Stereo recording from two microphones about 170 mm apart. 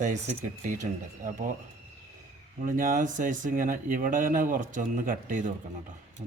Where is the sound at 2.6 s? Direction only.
55° right (ahead or behind).